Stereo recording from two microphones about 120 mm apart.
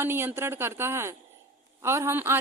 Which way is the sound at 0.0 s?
20° right (ahead or behind).